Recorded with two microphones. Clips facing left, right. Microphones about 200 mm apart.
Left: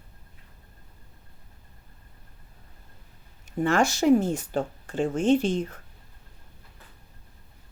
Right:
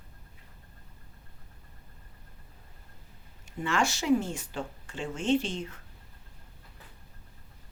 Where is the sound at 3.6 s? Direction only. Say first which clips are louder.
Left 7 dB; 50° left (ahead or behind).